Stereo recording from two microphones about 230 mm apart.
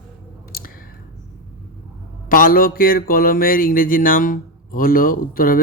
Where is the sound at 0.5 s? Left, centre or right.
Left.